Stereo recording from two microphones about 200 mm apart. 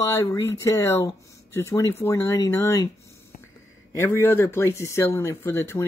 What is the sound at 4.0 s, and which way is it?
Speech, 10° left (ahead or behind).